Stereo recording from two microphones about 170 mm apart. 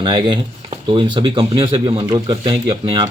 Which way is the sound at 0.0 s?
30° right (ahead or behind).